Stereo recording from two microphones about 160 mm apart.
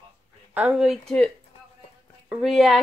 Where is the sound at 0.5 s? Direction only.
5° right (ahead or behind).